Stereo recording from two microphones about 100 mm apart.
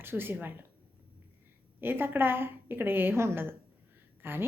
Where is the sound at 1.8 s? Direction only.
20° right (ahead or behind).